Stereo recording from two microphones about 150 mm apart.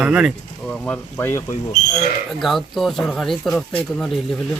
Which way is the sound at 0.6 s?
5° left (ahead or behind).